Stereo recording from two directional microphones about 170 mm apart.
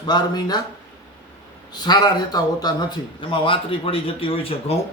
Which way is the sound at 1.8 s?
25° left (ahead or behind).